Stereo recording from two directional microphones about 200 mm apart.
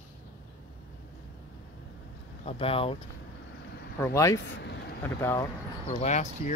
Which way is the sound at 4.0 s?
15° left (ahead or behind).